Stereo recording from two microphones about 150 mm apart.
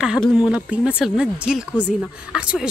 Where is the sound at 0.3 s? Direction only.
5° right (ahead or behind).